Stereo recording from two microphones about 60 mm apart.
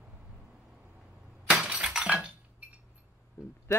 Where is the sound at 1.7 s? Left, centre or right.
Centre.